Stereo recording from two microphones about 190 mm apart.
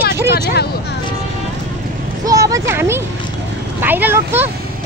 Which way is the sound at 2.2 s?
20° right (ahead or behind).